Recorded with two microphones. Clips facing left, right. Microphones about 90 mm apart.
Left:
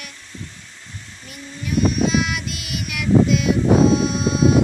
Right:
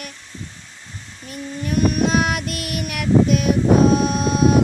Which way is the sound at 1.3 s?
50° right (ahead or behind).